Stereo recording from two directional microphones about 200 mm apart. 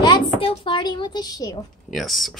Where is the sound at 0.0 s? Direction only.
25° left (ahead or behind).